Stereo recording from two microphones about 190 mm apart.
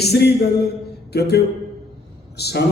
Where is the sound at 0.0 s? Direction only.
60° left (ahead or behind).